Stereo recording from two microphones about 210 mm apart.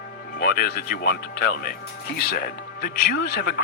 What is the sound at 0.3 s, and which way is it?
Speech, 45° left (ahead or behind).